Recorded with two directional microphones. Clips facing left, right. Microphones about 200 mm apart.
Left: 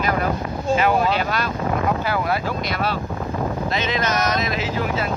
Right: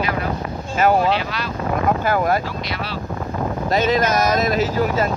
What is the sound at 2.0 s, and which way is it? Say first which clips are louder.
Speech: right 4 dB; 45° right (ahead or behind).